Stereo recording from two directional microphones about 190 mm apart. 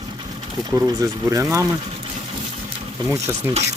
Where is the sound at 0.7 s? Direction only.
10° right (ahead or behind).